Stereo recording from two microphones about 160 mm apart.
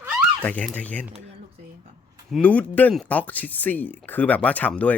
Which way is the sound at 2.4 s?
10° left (ahead or behind).